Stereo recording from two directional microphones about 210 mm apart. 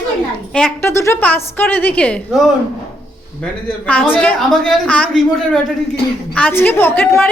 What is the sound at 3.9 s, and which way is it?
A woman's voice, 5° left (ahead or behind).